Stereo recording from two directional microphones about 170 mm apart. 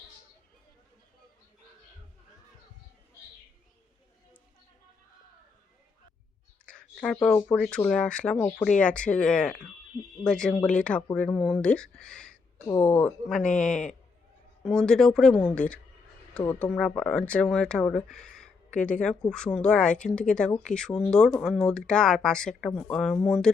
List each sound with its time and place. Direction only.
6.7 s speech: 5° left (ahead or behind)
12.6 s speech: 20° left (ahead or behind)